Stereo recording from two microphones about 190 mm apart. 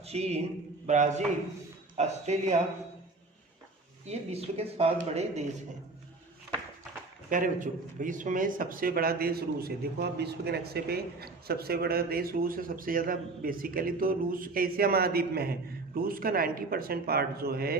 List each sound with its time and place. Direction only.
0.0 s a man's voice: 35° right (ahead or behind)
4.0 s a man's voice: 35° right (ahead or behind)
7.3 s speech: 45° right (ahead or behind)